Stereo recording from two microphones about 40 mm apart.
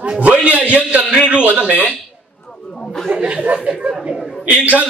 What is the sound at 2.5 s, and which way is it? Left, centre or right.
Chatter, centre.